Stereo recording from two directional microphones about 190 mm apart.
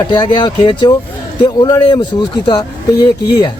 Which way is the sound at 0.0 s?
20° left (ahead or behind).